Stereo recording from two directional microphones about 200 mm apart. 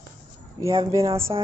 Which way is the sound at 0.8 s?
15° right (ahead or behind).